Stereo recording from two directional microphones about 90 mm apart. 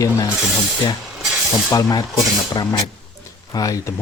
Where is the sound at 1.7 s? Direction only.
45° left (ahead or behind).